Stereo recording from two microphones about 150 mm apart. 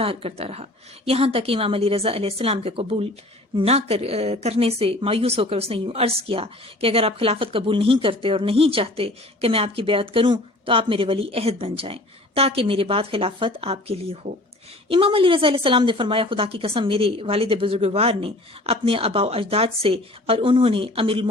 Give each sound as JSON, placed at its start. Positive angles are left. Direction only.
{"t": 0.0, "sound": "speech", "side_deg": -40}